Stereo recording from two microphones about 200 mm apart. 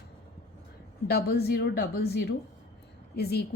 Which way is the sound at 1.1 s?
50° left (ahead or behind).